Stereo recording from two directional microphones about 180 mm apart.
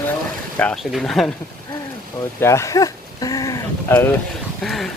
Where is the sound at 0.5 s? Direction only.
5° left (ahead or behind).